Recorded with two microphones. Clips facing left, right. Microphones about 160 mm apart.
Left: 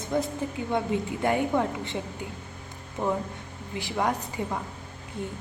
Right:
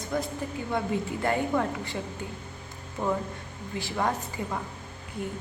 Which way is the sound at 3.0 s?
20° left (ahead or behind).